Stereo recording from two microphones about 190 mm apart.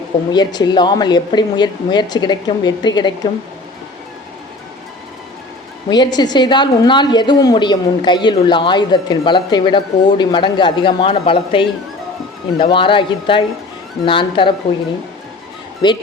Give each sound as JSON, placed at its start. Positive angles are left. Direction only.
{"t": 0.3, "sound": "a woman's voice", "side_deg": 20}
{"t": 5.9, "sound": "a woman's voice", "side_deg": 20}
{"t": 15.8, "sound": "a woman's voice", "side_deg": 20}